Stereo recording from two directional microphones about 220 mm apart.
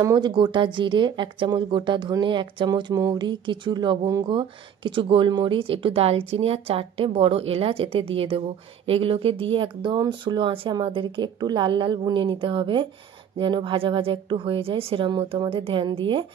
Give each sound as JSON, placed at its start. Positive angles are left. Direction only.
{"t": 0.0, "sound": "speech", "side_deg": -20}